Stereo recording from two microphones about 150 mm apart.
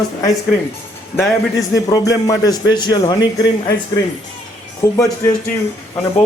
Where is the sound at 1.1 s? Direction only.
20° left (ahead or behind).